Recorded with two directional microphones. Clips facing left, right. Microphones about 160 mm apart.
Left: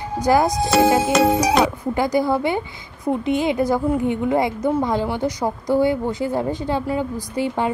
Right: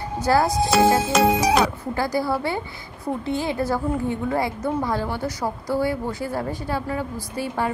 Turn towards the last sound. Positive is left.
turn(degrees=20)  # may be behind; listen again after turning